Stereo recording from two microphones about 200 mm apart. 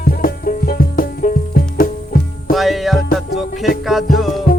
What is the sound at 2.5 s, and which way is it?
Music, centre (ahead or behind).